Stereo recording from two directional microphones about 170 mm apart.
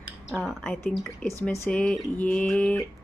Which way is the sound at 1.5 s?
5° left (ahead or behind).